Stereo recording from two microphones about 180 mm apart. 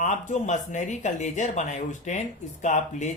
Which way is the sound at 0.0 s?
45° left (ahead or behind).